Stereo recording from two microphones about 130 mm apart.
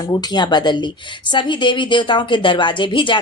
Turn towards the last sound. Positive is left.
turn(degrees=40)  # may be behind; listen again after turning